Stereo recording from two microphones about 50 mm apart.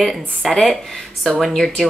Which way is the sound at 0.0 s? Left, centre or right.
Centre.